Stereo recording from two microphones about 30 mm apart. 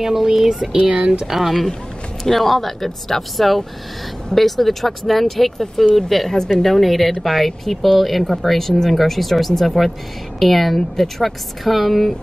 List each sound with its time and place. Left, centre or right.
0.0 s speech: centre
0.7 s speech: right
1.2 s speech: centre